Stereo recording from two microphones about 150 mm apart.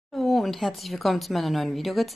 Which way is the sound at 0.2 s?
Centre (ahead or behind).